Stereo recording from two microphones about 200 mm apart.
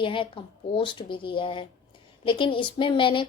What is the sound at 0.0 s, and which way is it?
A woman's voice, 25° left (ahead or behind).